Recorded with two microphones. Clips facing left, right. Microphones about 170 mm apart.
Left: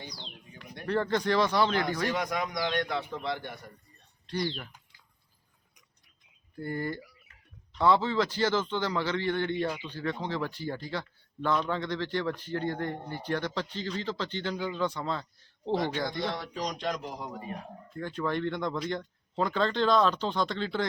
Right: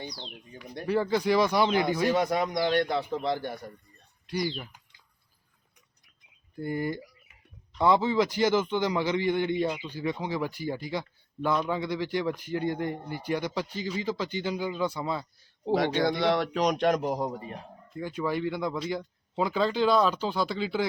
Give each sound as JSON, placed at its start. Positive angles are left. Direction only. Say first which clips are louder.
{"t": 0.9, "sound": "a man's voice", "louder": "right 2 dB", "side_deg": -5}
{"t": 2.1, "sound": "a man's voice", "louder": "right 5 dB", "side_deg": -30}
{"t": 4.3, "sound": "a man's voice", "louder": "right 2 dB", "side_deg": -10}
{"t": 6.6, "sound": "a man's voice", "louder": "right 3 dB", "side_deg": -15}
{"t": 16.0, "sound": "a man's voice", "louder": "right 8 dB", "side_deg": -80}
{"t": 17.9, "sound": "a man's voice", "louder": "right 1 dB", "side_deg": -10}